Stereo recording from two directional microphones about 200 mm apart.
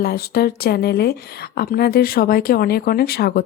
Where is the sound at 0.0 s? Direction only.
50° left (ahead or behind).